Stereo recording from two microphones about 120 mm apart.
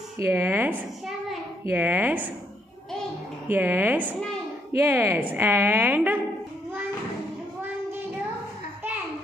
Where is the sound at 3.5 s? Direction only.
20° right (ahead or behind).